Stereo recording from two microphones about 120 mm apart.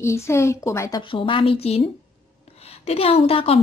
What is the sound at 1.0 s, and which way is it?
A woman's voice, 45° left (ahead or behind).